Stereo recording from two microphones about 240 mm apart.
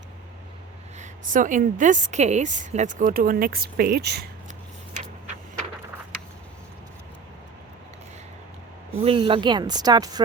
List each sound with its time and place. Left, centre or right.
0.9 s a woman's voice: right
9.0 s speech: right